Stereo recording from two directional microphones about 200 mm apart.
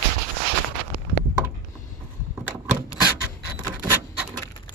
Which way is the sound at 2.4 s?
10° right (ahead or behind).